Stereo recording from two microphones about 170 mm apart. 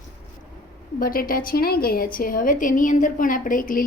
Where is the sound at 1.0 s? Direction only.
55° left (ahead or behind).